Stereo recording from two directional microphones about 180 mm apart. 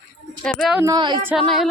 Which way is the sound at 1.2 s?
10° right (ahead or behind).